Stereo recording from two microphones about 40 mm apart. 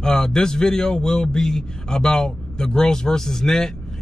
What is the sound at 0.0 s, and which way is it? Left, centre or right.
A man's voice, centre.